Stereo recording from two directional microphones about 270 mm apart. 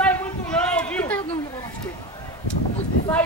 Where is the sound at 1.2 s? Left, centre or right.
Centre.